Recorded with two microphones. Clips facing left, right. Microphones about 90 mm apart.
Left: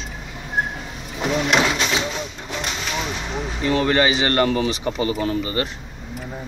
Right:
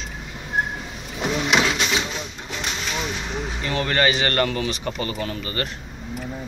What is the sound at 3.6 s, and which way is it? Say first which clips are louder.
Speech: left 4 dB; 25° left (ahead or behind).